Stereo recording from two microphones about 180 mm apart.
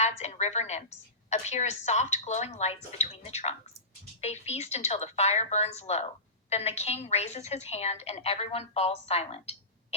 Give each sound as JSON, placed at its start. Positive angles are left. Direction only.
{"t": 0.0, "sound": "a woman's voice", "side_deg": 35}